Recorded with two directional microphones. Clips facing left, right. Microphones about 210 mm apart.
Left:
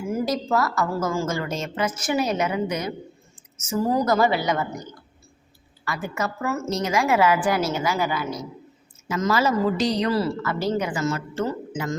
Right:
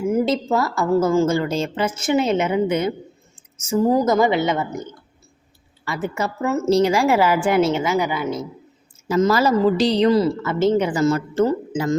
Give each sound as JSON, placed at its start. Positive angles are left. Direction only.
{"t": 0.1, "sound": "speech", "side_deg": -20}
{"t": 3.3, "sound": "a sound", "side_deg": -25}
{"t": 3.8, "sound": "speech", "side_deg": -20}
{"t": 5.8, "sound": "speech", "side_deg": -25}
{"t": 9.0, "sound": "speech", "side_deg": -35}